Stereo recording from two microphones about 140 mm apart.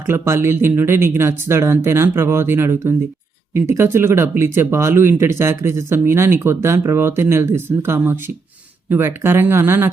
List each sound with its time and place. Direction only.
0.1 s speech: 20° right (ahead or behind)